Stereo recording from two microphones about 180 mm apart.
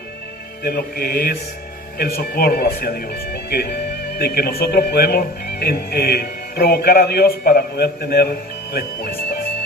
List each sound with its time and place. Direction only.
0.6 s speech: 60° left (ahead or behind)